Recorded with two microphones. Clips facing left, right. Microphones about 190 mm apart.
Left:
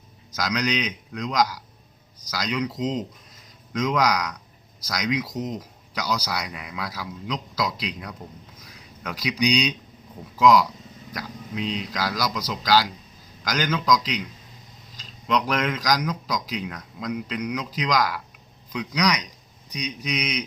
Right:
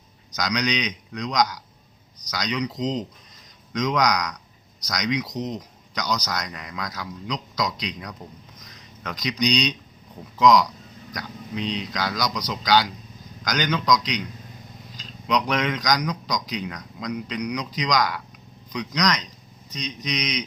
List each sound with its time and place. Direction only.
0.3 s speech: 5° left (ahead or behind)
8.5 s a sound: 10° left (ahead or behind)
10.3 s speech: 5° left (ahead or behind)